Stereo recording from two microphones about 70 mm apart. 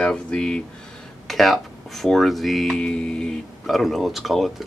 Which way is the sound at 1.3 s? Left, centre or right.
Centre.